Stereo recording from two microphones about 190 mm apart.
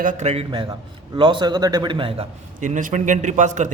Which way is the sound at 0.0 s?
40° right (ahead or behind).